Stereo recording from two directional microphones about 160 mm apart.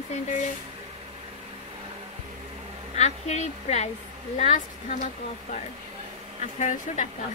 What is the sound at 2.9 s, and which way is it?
Speech, 45° left (ahead or behind).